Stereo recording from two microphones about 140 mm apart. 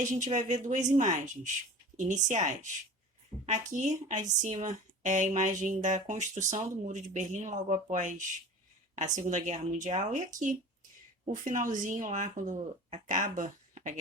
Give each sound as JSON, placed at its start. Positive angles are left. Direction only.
{"t": 0.3, "sound": "speech", "side_deg": -60}